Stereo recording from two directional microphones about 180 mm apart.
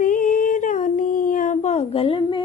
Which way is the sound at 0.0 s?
50° left (ahead or behind).